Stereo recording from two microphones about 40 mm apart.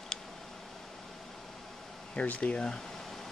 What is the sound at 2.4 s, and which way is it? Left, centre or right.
Speech, left.